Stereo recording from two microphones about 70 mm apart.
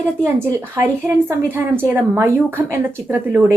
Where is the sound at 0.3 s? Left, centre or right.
Right.